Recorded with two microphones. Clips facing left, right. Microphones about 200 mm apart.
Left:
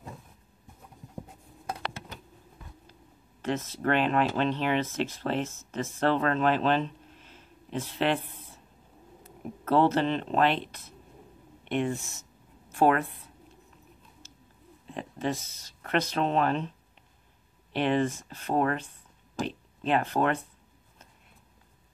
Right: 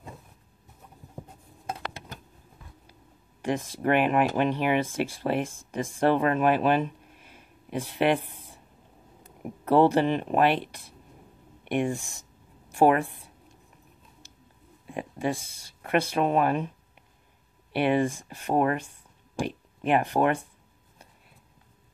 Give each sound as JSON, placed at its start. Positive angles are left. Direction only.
{"t": 3.4, "sound": "speech", "side_deg": -15}
{"t": 11.6, "sound": "a sound", "side_deg": -10}
{"t": 14.9, "sound": "speech", "side_deg": -10}
{"t": 17.7, "sound": "speech", "side_deg": -10}